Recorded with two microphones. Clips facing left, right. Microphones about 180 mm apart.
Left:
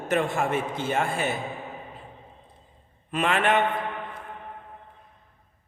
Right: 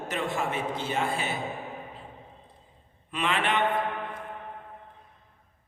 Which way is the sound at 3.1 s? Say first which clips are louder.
Left 5 dB; 50° left (ahead or behind).